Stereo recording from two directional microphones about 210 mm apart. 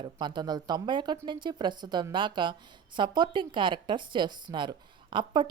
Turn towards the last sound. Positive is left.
turn(degrees=-20)  # may be behind; listen again after turning